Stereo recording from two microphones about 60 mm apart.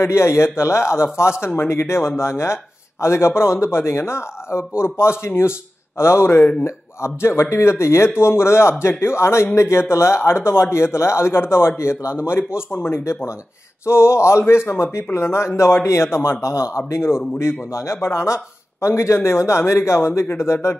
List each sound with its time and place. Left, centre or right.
0.0 s speech: left